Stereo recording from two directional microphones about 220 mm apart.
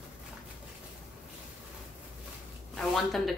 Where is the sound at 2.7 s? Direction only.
Centre (ahead or behind).